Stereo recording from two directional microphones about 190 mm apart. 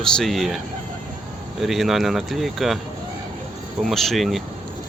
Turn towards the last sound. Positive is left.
turn(degrees=0)  # may be behind; listen again after turning